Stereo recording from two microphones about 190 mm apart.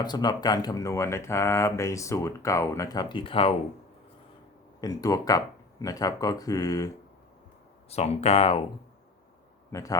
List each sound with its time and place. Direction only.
0.0 s speech: 20° left (ahead or behind)
4.8 s speech: 20° left (ahead or behind)
7.9 s speech: 35° left (ahead or behind)
9.7 s speech: 15° left (ahead or behind)